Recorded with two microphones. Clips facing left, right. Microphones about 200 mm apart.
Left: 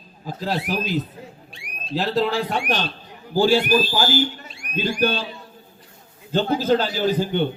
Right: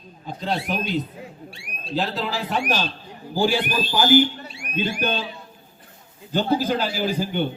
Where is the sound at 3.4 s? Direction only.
15° right (ahead or behind).